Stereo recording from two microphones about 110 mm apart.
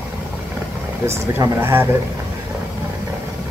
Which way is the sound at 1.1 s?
20° right (ahead or behind).